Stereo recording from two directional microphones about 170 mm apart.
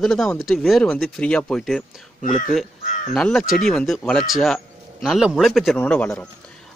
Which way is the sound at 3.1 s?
5° left (ahead or behind).